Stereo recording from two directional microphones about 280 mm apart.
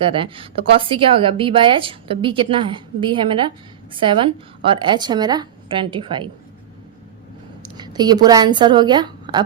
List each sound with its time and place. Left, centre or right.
0.0 s a woman's voice: centre
7.6 s a woman's voice: centre